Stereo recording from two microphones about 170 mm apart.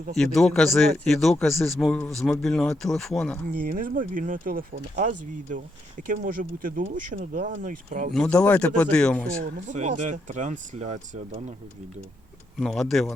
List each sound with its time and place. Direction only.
0.2 s speech: centre (ahead or behind)
3.5 s speech: 55° right (ahead or behind)
8.1 s speech: 5° left (ahead or behind)
9.4 s speech: 45° right (ahead or behind)
12.5 s speech: centre (ahead or behind)